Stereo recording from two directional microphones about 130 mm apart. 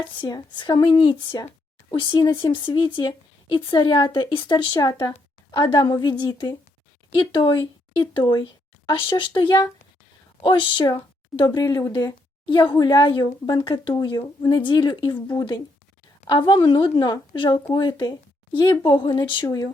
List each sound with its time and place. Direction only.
0.0 s speech: 35° left (ahead or behind)
19.5 s speech: 25° left (ahead or behind)